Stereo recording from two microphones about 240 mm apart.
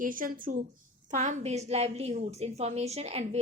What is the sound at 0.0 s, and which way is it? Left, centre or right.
A woman's voice, right.